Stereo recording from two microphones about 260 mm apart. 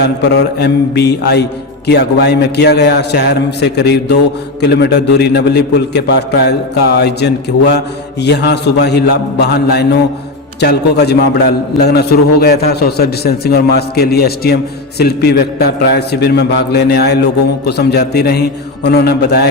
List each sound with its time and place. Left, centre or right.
0.0 s a man's voice: left